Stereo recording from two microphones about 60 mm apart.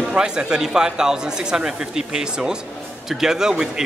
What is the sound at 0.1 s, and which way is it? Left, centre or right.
A man's voice, centre.